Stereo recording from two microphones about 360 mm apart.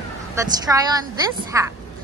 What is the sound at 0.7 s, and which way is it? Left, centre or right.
Speech, centre.